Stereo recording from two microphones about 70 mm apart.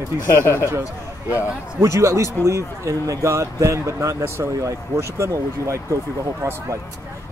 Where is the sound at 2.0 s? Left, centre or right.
Right.